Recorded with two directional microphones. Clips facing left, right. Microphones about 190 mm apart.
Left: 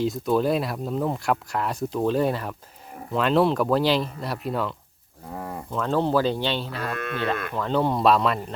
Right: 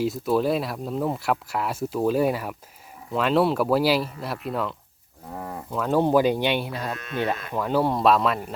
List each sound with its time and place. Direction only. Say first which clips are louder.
0.0 s speech: even; 5° right (ahead or behind)
6.9 s speech: left 4 dB; 60° left (ahead or behind)
7.5 s speech: right 2 dB; 10° right (ahead or behind)